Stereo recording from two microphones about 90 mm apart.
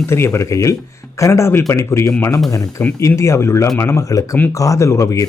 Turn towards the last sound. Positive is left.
turn(degrees=35)  # may be behind; listen again after turning